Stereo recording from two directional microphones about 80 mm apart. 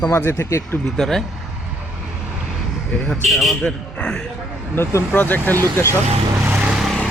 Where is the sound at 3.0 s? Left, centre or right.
Centre.